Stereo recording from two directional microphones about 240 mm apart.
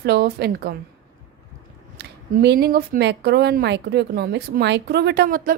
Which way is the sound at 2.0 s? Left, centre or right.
Right.